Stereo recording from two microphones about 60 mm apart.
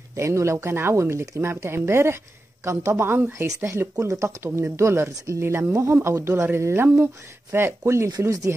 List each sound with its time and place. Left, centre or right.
0.1 s speech: right
4.0 s speech: right